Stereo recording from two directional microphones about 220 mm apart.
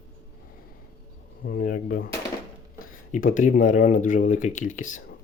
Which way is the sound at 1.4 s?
40° left (ahead or behind).